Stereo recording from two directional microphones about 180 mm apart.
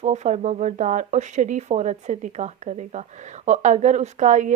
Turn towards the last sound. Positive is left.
turn(degrees=-40)  # may be behind; listen again after turning